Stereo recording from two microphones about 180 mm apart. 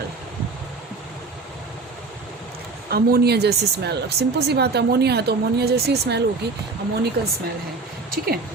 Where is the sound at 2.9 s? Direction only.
60° right (ahead or behind).